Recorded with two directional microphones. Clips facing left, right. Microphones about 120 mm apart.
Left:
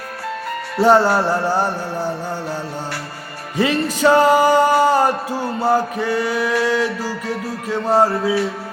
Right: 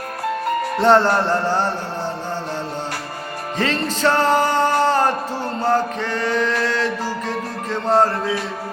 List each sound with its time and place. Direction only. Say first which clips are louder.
0.8 s music: left 2 dB; 5° left (ahead or behind)
3.6 s music: left 4 dB; 10° left (ahead or behind)